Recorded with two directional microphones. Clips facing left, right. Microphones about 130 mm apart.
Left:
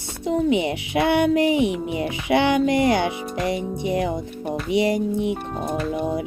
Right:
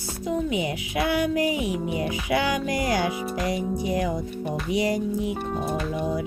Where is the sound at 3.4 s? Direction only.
25° left (ahead or behind).